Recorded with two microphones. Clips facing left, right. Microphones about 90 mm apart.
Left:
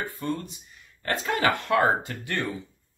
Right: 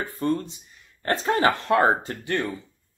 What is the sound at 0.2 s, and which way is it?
Speech, 35° right (ahead or behind).